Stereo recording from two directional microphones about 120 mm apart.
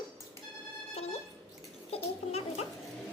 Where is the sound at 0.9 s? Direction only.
60° left (ahead or behind).